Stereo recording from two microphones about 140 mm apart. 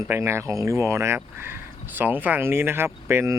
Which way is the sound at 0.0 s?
20° right (ahead or behind).